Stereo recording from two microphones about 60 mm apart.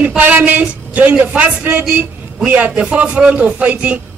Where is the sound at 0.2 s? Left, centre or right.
Right.